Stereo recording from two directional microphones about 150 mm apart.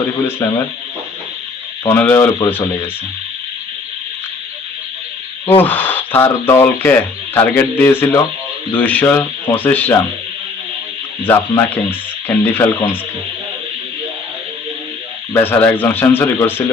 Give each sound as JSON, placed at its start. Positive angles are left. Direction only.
{"t": 0.3, "sound": "speech", "side_deg": 15}
{"t": 1.9, "sound": "speech", "side_deg": 15}
{"t": 5.6, "sound": "speech", "side_deg": 10}
{"t": 11.2, "sound": "speech", "side_deg": 15}
{"t": 15.4, "sound": "speech", "side_deg": 15}